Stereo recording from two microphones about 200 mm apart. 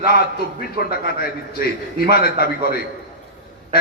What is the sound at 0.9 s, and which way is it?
A man's voice, 50° left (ahead or behind).